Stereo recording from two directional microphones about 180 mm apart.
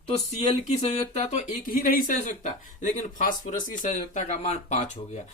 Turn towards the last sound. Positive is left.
turn(degrees=40)  # may be behind; listen again after turning